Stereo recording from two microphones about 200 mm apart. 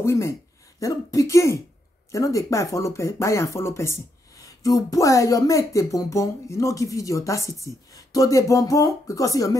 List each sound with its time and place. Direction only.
0.0 s speech: 15° left (ahead or behind)